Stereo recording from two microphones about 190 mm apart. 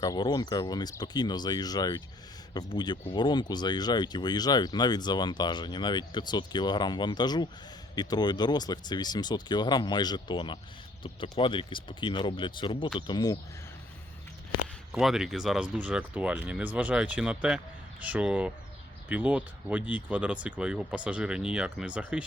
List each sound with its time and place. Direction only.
0.0 s speech: 20° left (ahead or behind)
14.9 s speech: centre (ahead or behind)